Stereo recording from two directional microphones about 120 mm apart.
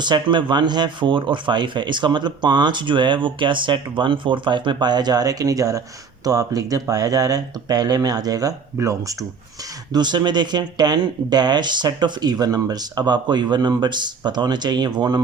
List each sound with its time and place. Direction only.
0.0 s speech: 40° right (ahead or behind)